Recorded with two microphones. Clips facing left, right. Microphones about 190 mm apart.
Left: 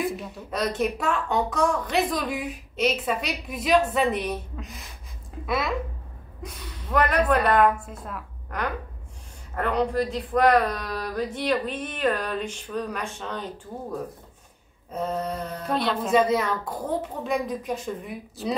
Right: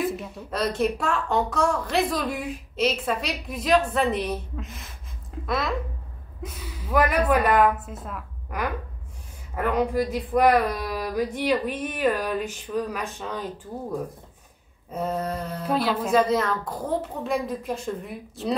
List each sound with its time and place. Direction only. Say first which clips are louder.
0.0 s a woman's voice: right 1 dB; centre (ahead or behind)
6.4 s speech: right 2 dB; 5° right (ahead or behind)
14.9 s a woman's voice: right 1 dB; centre (ahead or behind)
16.3 s a woman's voice: even; 5° left (ahead or behind)